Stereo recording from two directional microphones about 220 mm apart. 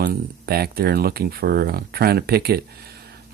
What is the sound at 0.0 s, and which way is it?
Speech, 45° right (ahead or behind).